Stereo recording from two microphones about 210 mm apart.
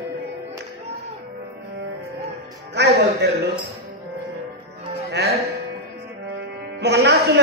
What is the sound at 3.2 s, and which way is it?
Speech, 50° right (ahead or behind).